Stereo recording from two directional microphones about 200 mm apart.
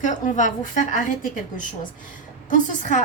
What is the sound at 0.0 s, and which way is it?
A woman's voice, 40° left (ahead or behind).